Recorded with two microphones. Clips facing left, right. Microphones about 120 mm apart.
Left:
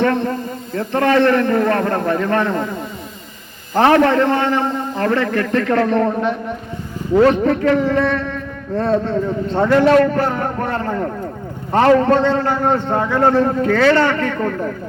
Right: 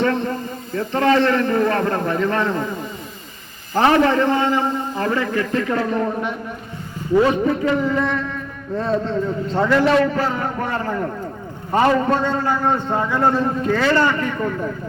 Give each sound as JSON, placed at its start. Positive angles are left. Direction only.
{"t": 0.0, "sound": "a man's voice", "side_deg": 60}
{"t": 3.8, "sound": "a man's voice", "side_deg": 55}
{"t": 8.8, "sound": "a man's voice", "side_deg": 65}
{"t": 11.7, "sound": "a man's voice", "side_deg": 65}